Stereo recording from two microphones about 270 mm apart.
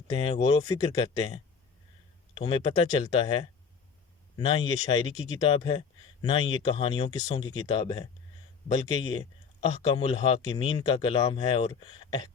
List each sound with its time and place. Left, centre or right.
0.1 s speech: centre